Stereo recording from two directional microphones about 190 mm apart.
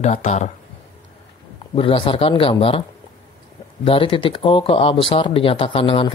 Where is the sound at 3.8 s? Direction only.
25° left (ahead or behind).